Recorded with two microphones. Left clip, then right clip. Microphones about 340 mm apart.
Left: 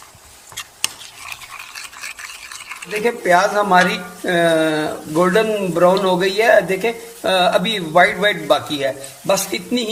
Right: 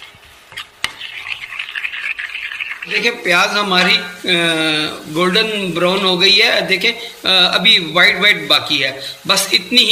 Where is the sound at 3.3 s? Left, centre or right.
Left.